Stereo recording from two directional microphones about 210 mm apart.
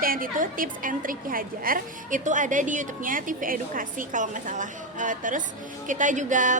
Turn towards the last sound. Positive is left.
turn(degrees=-35)  # may be behind; listen again after turning